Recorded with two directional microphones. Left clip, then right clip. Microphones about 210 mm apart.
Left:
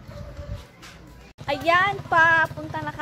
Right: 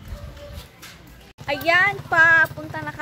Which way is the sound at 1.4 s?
Centre (ahead or behind).